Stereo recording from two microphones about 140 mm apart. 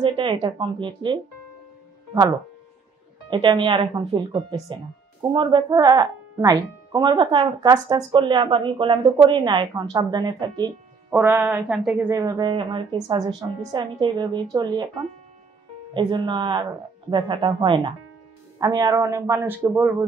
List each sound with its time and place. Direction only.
0.0 s speech: 35° right (ahead or behind)
3.3 s speech: 35° right (ahead or behind)
11.1 s a woman's voice: 15° right (ahead or behind)
12.1 s a man's voice: 25° right (ahead or behind)
15.9 s a man's voice: 35° right (ahead or behind); by 20.1 s 20° right (ahead or behind)